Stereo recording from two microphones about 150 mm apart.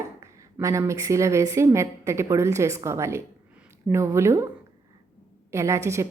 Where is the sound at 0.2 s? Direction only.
20° right (ahead or behind).